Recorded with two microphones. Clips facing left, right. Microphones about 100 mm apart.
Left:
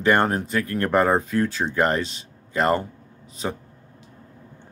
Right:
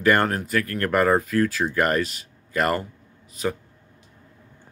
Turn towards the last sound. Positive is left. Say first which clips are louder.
# right 2 dB
turn(degrees=30)  # may be behind; listen again after turning